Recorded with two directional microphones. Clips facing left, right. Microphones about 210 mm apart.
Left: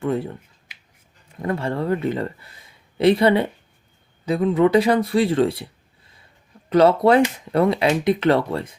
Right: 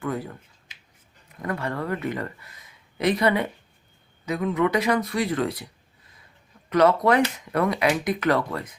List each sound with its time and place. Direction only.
0.0 s speech: 25° left (ahead or behind)
1.4 s speech: 25° left (ahead or behind)
6.7 s speech: 30° left (ahead or behind)